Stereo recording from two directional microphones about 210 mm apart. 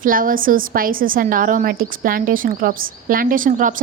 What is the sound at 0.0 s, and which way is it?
A woman's voice, 40° right (ahead or behind).